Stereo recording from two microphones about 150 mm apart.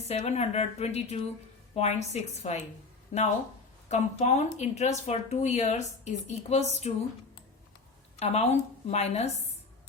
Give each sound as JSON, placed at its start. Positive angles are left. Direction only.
{"t": 0.1, "sound": "speech", "side_deg": 50}
{"t": 8.2, "sound": "speech", "side_deg": 45}